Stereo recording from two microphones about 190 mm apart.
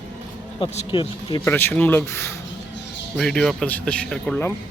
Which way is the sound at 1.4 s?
10° left (ahead or behind).